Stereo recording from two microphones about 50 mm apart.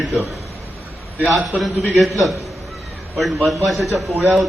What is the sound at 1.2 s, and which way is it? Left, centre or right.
A man's voice, centre.